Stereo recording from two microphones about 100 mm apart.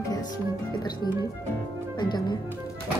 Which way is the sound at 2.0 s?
50° left (ahead or behind).